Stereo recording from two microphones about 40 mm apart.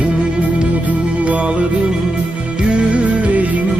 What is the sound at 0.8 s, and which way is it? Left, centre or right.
Music, right.